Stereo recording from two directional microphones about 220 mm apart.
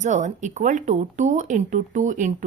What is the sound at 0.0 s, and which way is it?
A woman's voice, 35° right (ahead or behind).